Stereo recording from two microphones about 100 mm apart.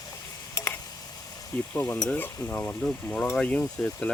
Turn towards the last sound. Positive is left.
turn(degrees=20)  # may be behind; listen again after turning